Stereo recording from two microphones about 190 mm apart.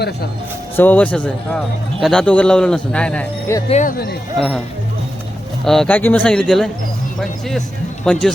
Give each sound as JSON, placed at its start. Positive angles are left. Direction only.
{"t": 0.8, "sound": "a man's voice", "side_deg": 10}
{"t": 3.7, "sound": "speech", "side_deg": 40}
{"t": 4.4, "sound": "a man's voice", "side_deg": 5}
{"t": 5.6, "sound": "a man's voice", "side_deg": 5}